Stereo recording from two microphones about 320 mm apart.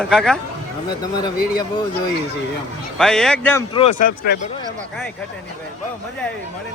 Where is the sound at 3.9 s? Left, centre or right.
Left.